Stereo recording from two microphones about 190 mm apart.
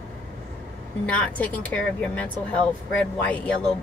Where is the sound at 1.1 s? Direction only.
10° left (ahead or behind).